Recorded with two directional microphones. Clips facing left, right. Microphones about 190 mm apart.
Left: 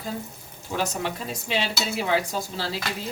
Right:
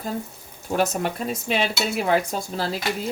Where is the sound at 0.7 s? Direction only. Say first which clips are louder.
Right 5 dB; 50° right (ahead or behind).